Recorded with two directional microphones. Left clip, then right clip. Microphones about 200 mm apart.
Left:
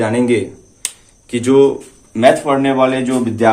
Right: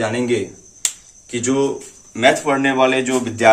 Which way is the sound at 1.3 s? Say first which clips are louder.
Left 8 dB; 50° left (ahead or behind).